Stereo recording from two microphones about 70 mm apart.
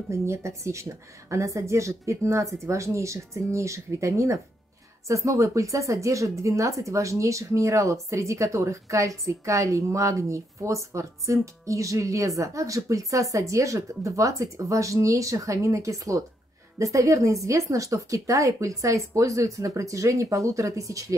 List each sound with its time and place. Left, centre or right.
0.1 s speech: right